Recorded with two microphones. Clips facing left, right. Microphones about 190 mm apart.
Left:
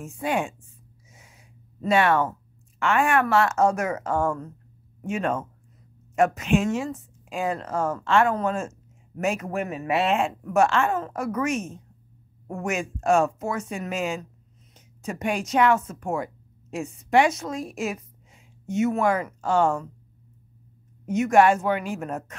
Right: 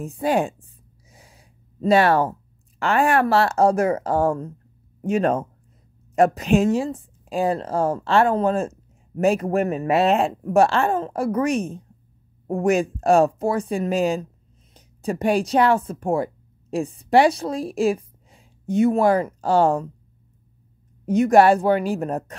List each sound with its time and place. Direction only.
0.0 s speech: 35° right (ahead or behind)
1.1 s gasp: 35° right (ahead or behind)
2.8 s a woman's voice: 35° right (ahead or behind)
21.0 s speech: 35° right (ahead or behind)